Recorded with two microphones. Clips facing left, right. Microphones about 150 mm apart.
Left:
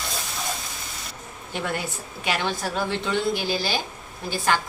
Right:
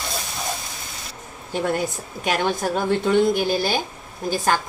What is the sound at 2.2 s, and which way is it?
Speech, 45° right (ahead or behind).